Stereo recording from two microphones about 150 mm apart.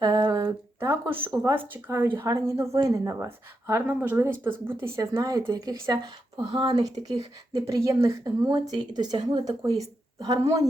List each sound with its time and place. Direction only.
0.0 s a woman's voice: 25° right (ahead or behind)